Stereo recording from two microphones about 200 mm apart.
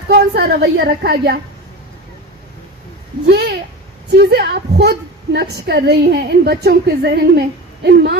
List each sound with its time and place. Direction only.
0.1 s a woman's voice: 50° right (ahead or behind)
3.2 s a woman's voice: 55° right (ahead or behind)